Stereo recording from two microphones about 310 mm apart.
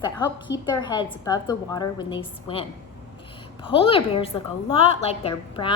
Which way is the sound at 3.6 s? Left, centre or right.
Centre.